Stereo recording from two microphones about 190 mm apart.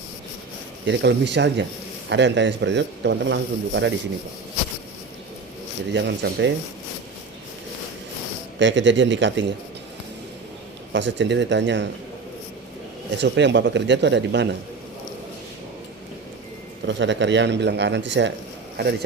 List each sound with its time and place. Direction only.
0.9 s speech: 65° right (ahead or behind)
5.9 s speech: 65° right (ahead or behind)
8.5 s speech: 70° right (ahead or behind)
10.9 s speech: 70° right (ahead or behind)
13.2 s speech: 70° right (ahead or behind)
16.8 s speech: 70° right (ahead or behind)